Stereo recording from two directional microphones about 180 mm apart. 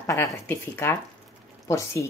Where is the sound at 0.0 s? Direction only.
15° left (ahead or behind).